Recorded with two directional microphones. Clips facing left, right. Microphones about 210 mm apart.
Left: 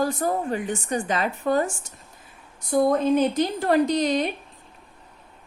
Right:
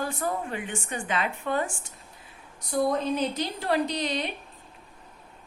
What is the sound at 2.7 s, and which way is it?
A woman's voice, 50° left (ahead or behind).